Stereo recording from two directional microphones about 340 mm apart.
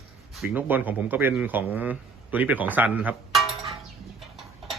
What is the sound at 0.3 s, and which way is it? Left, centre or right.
Speech, centre.